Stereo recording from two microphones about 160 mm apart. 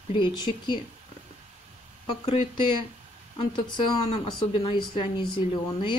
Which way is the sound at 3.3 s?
30° left (ahead or behind).